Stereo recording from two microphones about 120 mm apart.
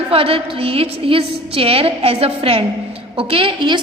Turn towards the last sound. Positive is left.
turn(degrees=-45)  # may be behind; listen again after turning